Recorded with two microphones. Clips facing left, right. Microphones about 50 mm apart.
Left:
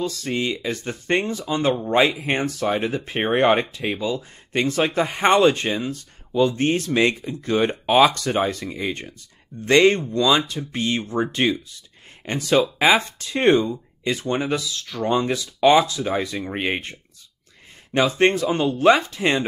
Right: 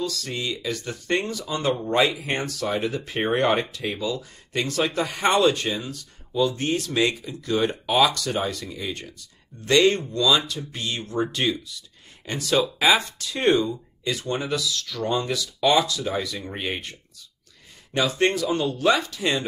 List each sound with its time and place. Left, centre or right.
0.0 s speech: left
17.9 s speech: left